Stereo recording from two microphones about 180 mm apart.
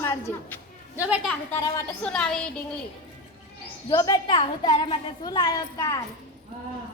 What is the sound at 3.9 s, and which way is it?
A woman's voice, 25° left (ahead or behind).